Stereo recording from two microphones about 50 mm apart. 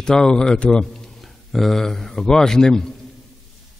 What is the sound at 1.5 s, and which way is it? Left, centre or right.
A man's voice, centre.